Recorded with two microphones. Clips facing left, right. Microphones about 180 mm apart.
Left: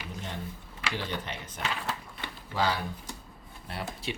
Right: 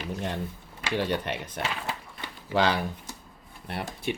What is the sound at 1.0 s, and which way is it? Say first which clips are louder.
Speech: right 7 dB; 65° right (ahead or behind).